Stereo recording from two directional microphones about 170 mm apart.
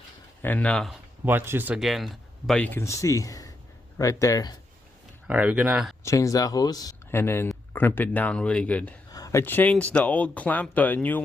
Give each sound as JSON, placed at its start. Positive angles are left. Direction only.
{"t": 0.4, "sound": "speech", "side_deg": 10}
{"t": 1.2, "sound": "speech", "side_deg": -10}
{"t": 5.3, "sound": "speech", "side_deg": -10}
{"t": 6.0, "sound": "speech", "side_deg": 20}
{"t": 9.1, "sound": "speech", "side_deg": 20}